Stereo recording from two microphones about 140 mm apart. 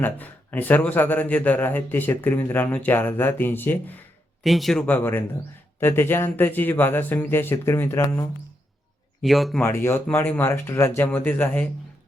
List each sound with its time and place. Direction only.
0.0 s speech: 10° left (ahead or behind)
4.4 s speech: centre (ahead or behind); by 8.3 s 20° left (ahead or behind)
9.2 s speech: centre (ahead or behind)
9.6 s speech: 15° left (ahead or behind)